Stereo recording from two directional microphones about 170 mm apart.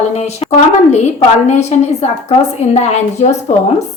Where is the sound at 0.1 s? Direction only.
40° left (ahead or behind).